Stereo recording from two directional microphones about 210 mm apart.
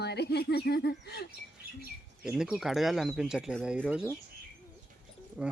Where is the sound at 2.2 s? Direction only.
5° right (ahead or behind).